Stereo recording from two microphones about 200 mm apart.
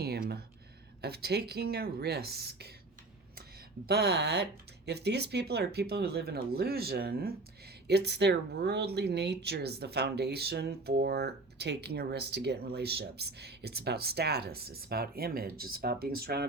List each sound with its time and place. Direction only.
0.0 s a sound: 50° right (ahead or behind)
1.0 s speech: 50° right (ahead or behind)
3.8 s speech: 55° right (ahead or behind)